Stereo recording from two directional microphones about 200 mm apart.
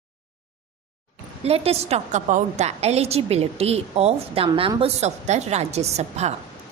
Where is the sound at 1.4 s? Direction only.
30° right (ahead or behind).